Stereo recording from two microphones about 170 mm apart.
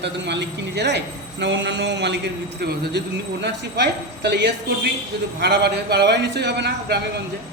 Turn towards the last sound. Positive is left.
turn(degrees=-80)